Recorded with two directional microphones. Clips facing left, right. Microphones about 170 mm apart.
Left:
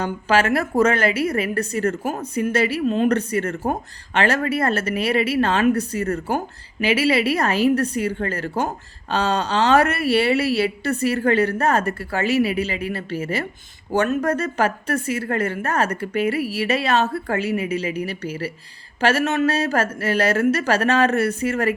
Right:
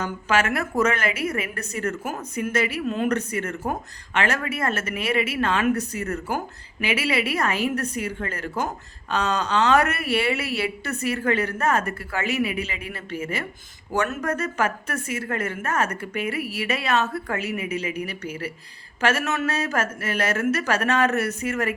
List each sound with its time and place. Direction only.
0.0 s a woman's voice: 30° left (ahead or behind)